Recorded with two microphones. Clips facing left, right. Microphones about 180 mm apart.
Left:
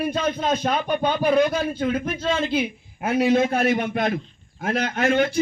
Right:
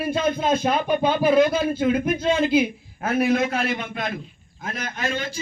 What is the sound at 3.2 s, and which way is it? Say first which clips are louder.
Speech: left 2 dB; 25° left (ahead or behind).